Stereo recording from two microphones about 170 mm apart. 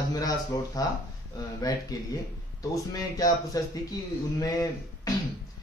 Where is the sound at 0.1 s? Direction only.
20° left (ahead or behind).